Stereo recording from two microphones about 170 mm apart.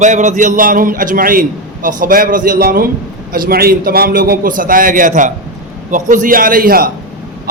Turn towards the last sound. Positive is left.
turn(degrees=-55)  # may be behind; listen again after turning